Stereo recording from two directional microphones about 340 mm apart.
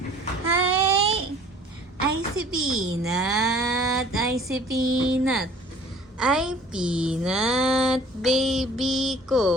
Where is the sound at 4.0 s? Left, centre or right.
Centre.